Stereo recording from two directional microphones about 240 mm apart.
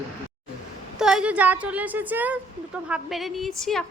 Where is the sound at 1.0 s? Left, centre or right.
Centre.